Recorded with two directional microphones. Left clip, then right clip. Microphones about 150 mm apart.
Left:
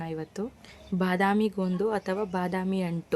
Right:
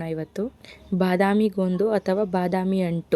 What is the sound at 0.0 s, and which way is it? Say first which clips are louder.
Speech: right 6 dB; 20° right (ahead or behind).